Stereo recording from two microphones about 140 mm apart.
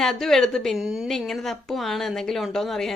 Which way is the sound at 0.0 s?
5° left (ahead or behind).